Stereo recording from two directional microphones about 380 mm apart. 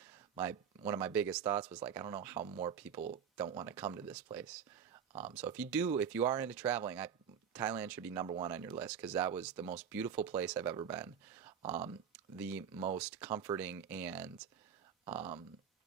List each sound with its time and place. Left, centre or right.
0.3 s speech: centre